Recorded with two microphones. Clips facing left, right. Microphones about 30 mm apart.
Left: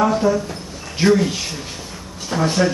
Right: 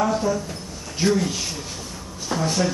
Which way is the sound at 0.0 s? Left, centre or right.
Left.